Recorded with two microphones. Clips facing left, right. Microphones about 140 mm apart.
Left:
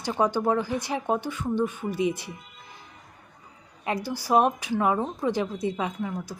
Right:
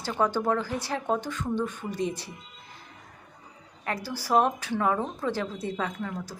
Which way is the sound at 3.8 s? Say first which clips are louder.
Left 3 dB; 15° left (ahead or behind).